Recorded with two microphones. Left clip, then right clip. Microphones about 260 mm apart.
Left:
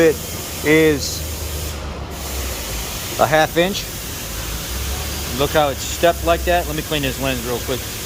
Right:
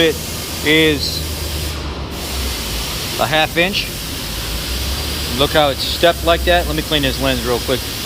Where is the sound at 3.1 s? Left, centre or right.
Left.